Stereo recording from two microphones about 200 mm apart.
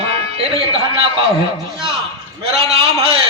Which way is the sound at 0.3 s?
30° right (ahead or behind).